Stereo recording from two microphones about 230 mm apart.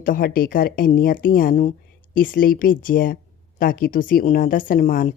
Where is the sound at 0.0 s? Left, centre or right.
Left.